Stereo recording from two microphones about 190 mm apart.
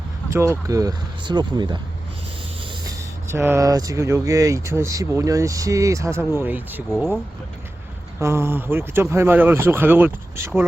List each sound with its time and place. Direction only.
0.3 s speech: 15° right (ahead or behind)
2.8 s speech: 15° right (ahead or behind)
6.9 s speech: centre (ahead or behind)
8.2 s speech: 15° right (ahead or behind)